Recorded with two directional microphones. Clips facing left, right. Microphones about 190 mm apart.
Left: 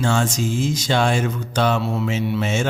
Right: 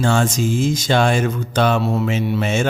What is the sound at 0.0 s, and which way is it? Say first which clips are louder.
Mantra: right 3 dB; 55° right (ahead or behind).